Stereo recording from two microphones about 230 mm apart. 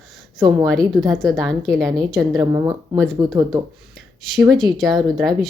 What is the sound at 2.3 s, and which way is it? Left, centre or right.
Speech, centre.